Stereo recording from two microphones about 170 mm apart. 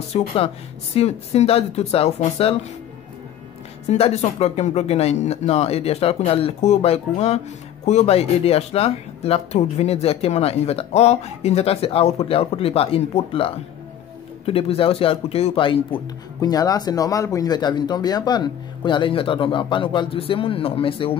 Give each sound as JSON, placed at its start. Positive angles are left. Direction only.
{"t": 0.1, "sound": "speech", "side_deg": 35}
{"t": 3.9, "sound": "speech", "side_deg": 40}